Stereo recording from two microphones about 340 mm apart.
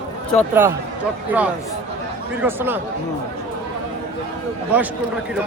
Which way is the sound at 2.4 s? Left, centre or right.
Centre.